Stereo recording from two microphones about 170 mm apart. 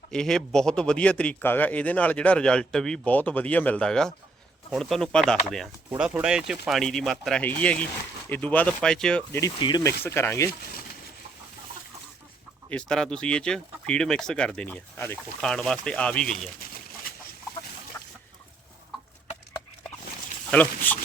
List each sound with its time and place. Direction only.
0.1 s a man's voice: 5° left (ahead or behind)
5.9 s a man's voice: 10° right (ahead or behind)
9.6 s speech: 25° left (ahead or behind)
10.0 s a man's voice: 15° left (ahead or behind)
12.7 s speech: 5° left (ahead or behind)
20.5 s a man's voice: 10° left (ahead or behind)